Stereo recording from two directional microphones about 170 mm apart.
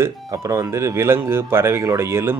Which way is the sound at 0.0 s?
20° right (ahead or behind).